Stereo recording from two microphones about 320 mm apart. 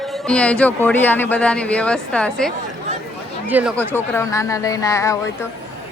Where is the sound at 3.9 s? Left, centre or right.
Centre.